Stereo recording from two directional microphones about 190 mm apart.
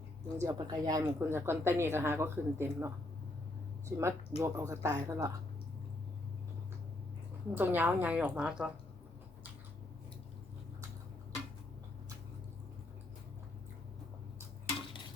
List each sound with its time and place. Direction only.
0.3 s a woman's voice: 15° right (ahead or behind)
7.5 s a woman's voice: 10° right (ahead or behind)